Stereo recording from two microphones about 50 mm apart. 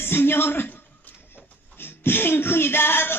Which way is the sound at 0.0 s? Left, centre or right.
Left.